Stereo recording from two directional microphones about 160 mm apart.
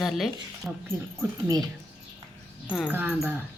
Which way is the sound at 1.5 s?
25° right (ahead or behind).